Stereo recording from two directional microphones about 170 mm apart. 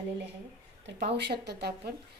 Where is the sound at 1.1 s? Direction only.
80° right.